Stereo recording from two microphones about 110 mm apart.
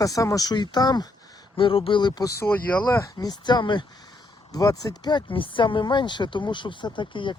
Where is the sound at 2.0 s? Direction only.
40° left (ahead or behind).